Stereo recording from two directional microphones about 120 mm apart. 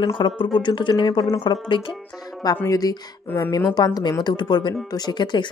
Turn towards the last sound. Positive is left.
turn(degrees=40)  # may be behind; listen again after turning